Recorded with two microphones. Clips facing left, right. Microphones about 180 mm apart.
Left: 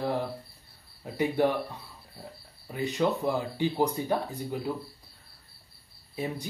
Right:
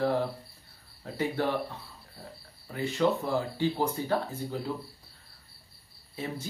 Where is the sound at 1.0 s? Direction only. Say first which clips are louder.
Left 4 dB; 15° left (ahead or behind).